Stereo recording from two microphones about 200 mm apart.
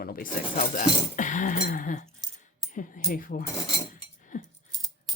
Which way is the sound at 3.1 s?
45° left (ahead or behind).